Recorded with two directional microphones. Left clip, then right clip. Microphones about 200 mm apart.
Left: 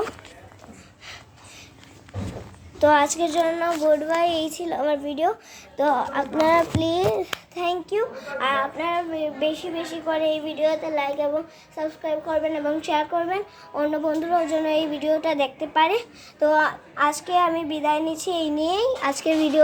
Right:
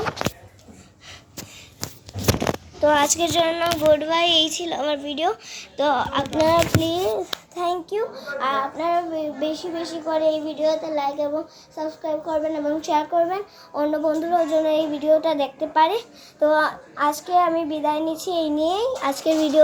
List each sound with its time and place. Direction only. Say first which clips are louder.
2.8 s speech: even; 10° left (ahead or behind)
6.8 s speech: left 1 dB; 15° left (ahead or behind)
7.2 s speech: right 1 dB; centre (ahead or behind)